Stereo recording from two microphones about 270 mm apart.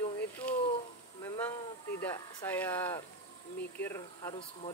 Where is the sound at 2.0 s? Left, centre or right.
Centre.